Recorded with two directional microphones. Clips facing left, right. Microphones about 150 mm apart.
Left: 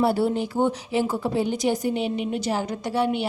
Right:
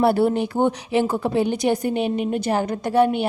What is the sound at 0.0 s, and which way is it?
A woman's voice, 60° right (ahead or behind).